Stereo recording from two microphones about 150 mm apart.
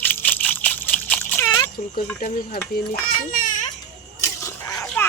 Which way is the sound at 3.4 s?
60° left (ahead or behind).